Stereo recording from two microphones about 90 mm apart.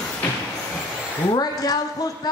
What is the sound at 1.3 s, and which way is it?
Speech, 45° left (ahead or behind).